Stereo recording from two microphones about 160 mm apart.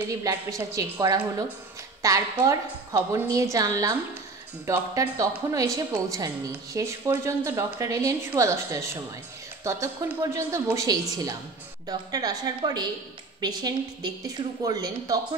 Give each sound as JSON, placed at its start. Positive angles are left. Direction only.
{"t": 0.2, "sound": "a woman's voice", "side_deg": -20}